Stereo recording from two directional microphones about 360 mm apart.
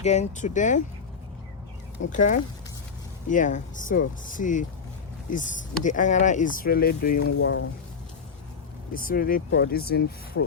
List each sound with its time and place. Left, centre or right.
0.0 s speech: centre
2.0 s speech: left
7.1 s speech: left
7.4 s speech: left
8.9 s speech: left